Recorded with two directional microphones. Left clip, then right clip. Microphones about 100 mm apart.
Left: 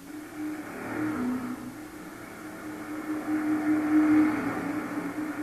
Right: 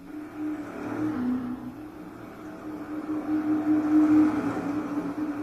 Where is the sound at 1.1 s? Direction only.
35° left (ahead or behind).